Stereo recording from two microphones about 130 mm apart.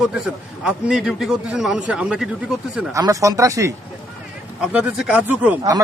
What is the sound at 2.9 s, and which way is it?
Speech, 25° right (ahead or behind).